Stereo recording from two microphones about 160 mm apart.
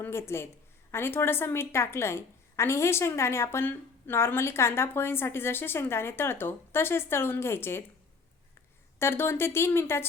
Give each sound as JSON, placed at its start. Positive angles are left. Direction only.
{"t": 0.0, "sound": "a woman's voice", "side_deg": 15}
{"t": 9.0, "sound": "a woman's voice", "side_deg": 15}